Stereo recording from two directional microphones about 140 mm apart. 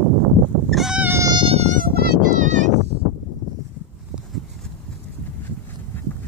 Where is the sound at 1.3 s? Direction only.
45° right (ahead or behind).